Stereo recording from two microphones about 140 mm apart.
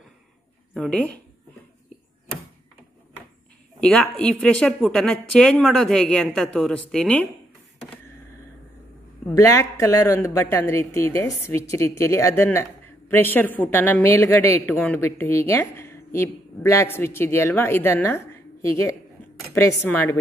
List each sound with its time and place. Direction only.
0.7 s a woman's voice: 10° left (ahead or behind)
3.8 s a woman's voice: 10° left (ahead or behind)
9.2 s a man's voice: 25° left (ahead or behind)